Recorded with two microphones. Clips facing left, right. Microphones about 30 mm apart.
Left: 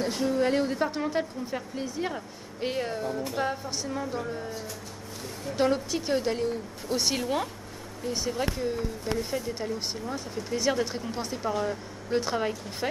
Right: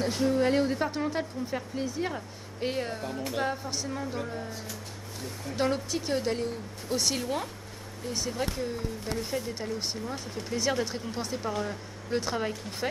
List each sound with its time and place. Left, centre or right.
0.0 s speech: centre
5.6 s speech: centre
7.0 s speech: centre